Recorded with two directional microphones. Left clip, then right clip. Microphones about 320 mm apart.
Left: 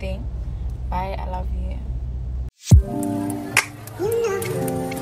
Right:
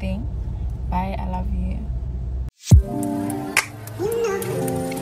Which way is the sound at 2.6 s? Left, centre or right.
Centre.